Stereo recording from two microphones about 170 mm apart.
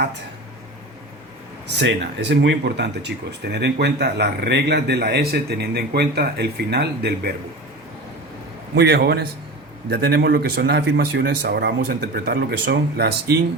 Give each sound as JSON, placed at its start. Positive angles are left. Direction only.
{"t": 1.8, "sound": "a man's voice", "side_deg": -90}
{"t": 8.7, "sound": "a man's voice", "side_deg": -70}